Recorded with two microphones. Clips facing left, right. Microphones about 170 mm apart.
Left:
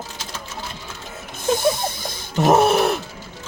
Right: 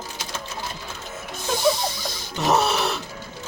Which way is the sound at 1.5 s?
50° left (ahead or behind).